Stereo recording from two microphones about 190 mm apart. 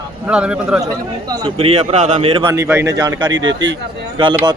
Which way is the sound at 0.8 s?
20° right (ahead or behind).